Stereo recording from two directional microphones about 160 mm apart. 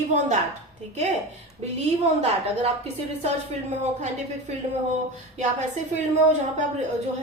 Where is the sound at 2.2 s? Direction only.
40° right (ahead or behind).